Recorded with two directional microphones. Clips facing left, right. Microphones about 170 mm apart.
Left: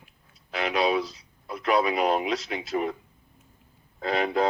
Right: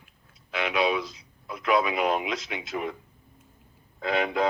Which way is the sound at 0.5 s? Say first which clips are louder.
Left 1 dB; 35° left (ahead or behind).